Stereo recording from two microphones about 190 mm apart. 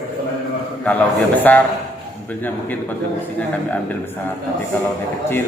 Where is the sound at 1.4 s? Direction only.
10° left (ahead or behind).